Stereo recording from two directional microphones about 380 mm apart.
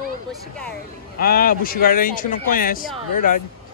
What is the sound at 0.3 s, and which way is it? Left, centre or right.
Speech, centre.